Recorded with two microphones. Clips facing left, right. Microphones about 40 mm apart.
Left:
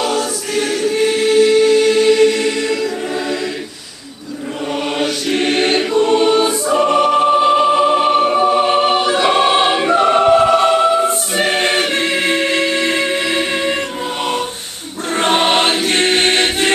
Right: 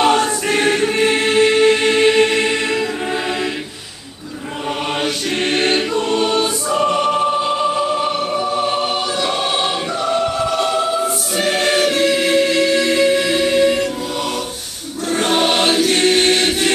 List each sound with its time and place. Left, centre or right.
0.0 s choir: right
5.0 s choir: centre
6.0 s choir: centre